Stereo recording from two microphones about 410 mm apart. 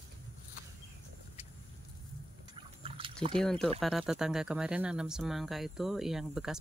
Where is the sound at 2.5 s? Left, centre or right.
Centre.